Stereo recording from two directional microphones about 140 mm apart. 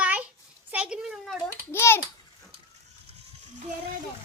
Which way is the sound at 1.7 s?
20° left (ahead or behind).